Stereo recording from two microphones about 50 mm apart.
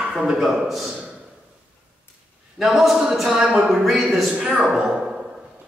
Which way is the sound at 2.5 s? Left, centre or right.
Centre.